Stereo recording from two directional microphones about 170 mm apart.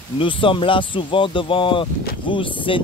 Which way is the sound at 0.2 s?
30° left (ahead or behind).